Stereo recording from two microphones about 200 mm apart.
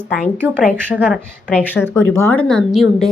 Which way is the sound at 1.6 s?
10° left (ahead or behind).